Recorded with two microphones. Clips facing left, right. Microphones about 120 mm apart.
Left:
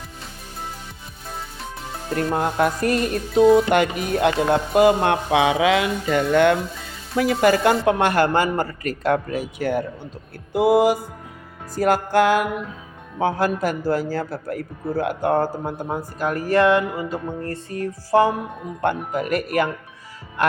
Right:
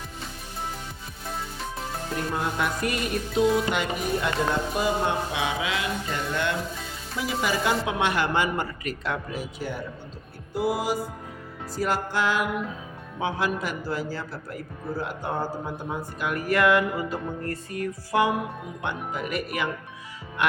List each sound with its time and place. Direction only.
2.3 s a man's voice: 45° left (ahead or behind)
3.7 s music: 65° left (ahead or behind)
7.2 s a man's voice: 60° left (ahead or behind)
10.5 s music: 60° left (ahead or behind)
11.7 s a man's voice: 50° left (ahead or behind); by 18.3 s 35° left (ahead or behind)
18.8 s a man's voice: 45° left (ahead or behind)
20.4 s music: 40° left (ahead or behind)